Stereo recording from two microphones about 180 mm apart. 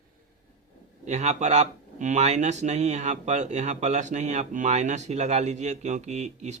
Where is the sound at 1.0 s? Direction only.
40° right (ahead or behind).